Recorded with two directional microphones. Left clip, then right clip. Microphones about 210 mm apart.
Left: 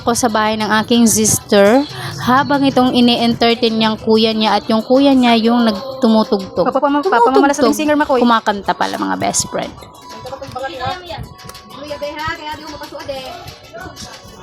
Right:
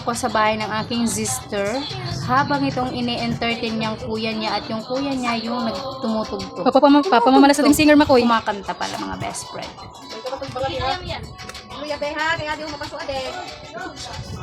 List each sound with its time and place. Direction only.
0.0 s speech: 40° left (ahead or behind)
6.7 s speech: 20° right (ahead or behind)
8.3 s speech: 40° left (ahead or behind)